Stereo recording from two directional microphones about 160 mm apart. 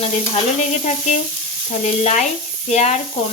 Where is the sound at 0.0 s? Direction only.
40° left (ahead or behind).